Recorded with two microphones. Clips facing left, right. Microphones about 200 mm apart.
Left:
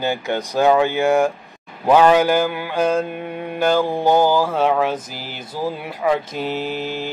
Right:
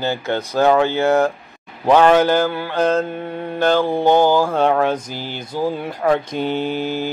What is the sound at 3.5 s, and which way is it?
Mantra, 10° left (ahead or behind).